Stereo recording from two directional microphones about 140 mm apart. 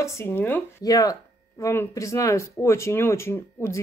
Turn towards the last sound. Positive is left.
turn(degrees=20)  # may be behind; listen again after turning